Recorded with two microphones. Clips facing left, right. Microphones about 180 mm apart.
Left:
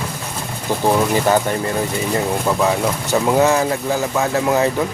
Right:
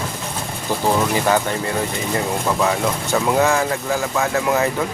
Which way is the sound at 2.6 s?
20° left (ahead or behind).